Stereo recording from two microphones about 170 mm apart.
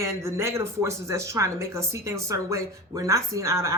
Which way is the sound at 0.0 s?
15° right (ahead or behind).